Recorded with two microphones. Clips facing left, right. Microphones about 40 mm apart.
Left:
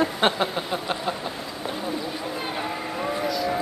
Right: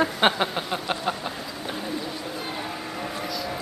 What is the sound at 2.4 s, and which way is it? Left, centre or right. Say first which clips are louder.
Vehicle: left 3 dB; centre.